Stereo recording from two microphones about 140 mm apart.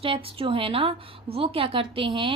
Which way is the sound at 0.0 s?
40° right (ahead or behind).